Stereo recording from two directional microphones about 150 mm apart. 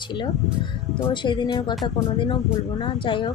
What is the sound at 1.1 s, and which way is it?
Speech, 30° left (ahead or behind).